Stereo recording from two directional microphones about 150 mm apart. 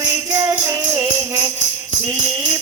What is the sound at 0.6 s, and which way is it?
Music, 20° right (ahead or behind).